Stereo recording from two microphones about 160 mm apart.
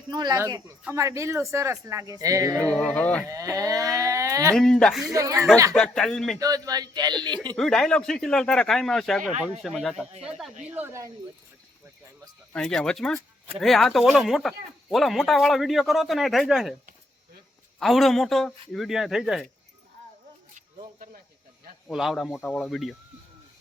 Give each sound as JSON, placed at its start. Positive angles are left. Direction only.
{"t": 0.1, "sound": "speech", "side_deg": -25}
{"t": 2.7, "sound": "speech", "side_deg": 10}
{"t": 3.2, "sound": "livestock", "side_deg": -20}
{"t": 4.5, "sound": "a man's voice", "side_deg": 5}
{"t": 5.1, "sound": "speech", "side_deg": -20}
{"t": 5.7, "sound": "a man's voice", "side_deg": 5}
{"t": 6.4, "sound": "speech", "side_deg": -20}
{"t": 7.5, "sound": "a man's voice", "side_deg": 5}
{"t": 12.5, "sound": "a man's voice", "side_deg": 5}
{"t": 17.7, "sound": "a man's voice", "side_deg": 0}
{"t": 21.8, "sound": "a man's voice", "side_deg": 0}